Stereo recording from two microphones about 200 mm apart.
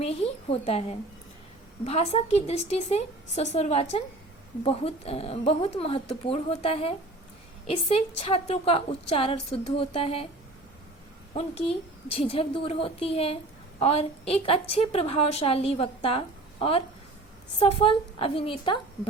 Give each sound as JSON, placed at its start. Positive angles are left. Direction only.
{"t": 0.5, "sound": "a woman's voice", "side_deg": 30}
{"t": 12.1, "sound": "a woman's voice", "side_deg": 30}